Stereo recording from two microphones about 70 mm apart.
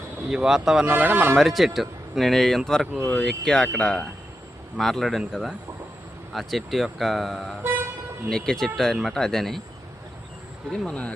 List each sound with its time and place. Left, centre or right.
0.3 s a man's voice: centre
0.9 s speech: right
1.4 s speech: centre
3.0 s speech: centre
3.2 s speech: centre
4.8 s speech: centre
7.6 s vehicle: right
8.3 s speech: centre
10.8 s speech: centre